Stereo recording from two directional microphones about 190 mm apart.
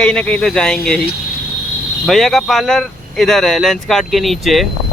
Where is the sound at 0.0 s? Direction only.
5° left (ahead or behind).